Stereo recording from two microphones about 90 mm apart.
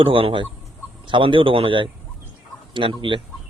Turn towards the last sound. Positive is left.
turn(degrees=-65)  # may be behind; listen again after turning